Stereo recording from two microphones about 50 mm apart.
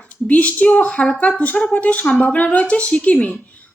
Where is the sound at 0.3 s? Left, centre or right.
Left.